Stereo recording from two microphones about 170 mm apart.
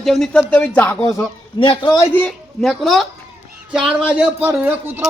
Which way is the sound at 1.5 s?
30° left (ahead or behind).